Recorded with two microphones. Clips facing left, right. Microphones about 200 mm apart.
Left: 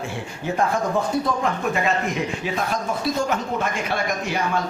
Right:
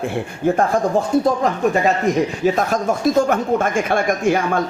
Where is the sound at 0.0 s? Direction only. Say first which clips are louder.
Right 9 dB; 55° right (ahead or behind).